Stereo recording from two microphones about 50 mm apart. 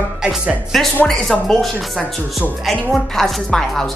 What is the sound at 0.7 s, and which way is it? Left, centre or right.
Speech, centre.